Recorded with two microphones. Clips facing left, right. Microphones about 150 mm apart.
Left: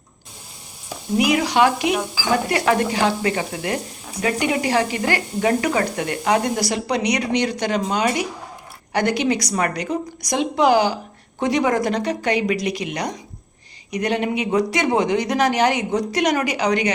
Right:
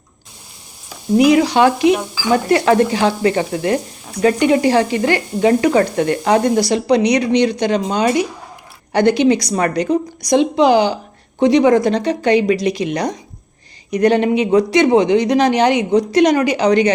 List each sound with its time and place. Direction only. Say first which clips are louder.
1.3 s speech: right 2 dB; 30° right (ahead or behind)
2.5 s stir: right 6 dB; 30° right (ahead or behind)
4.2 s speech: right 8 dB; 35° right (ahead or behind)